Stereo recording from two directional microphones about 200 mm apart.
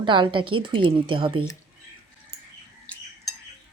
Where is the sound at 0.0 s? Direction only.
25° right (ahead or behind).